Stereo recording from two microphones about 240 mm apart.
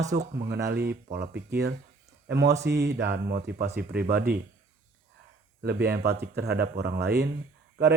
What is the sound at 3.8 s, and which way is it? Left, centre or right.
Speech, right.